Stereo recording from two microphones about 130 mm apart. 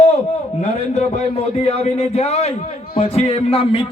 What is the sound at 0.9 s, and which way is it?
A man's voice, 60° left (ahead or behind).